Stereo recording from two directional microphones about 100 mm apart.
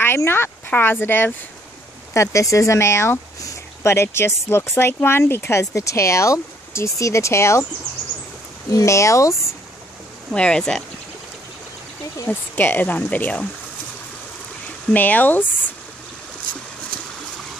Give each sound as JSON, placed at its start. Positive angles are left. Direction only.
{"t": 0.0, "sound": "speech", "side_deg": 25}
{"t": 8.7, "sound": "speech", "side_deg": 30}
{"t": 10.3, "sound": "speech", "side_deg": 10}
{"t": 12.3, "sound": "speech", "side_deg": 20}
{"t": 14.9, "sound": "speech", "side_deg": 15}